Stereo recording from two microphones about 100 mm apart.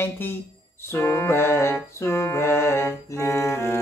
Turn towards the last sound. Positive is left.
turn(degrees=25)  # may be behind; listen again after turning